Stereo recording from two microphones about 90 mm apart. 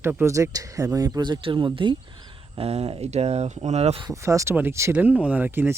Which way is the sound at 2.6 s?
90° right.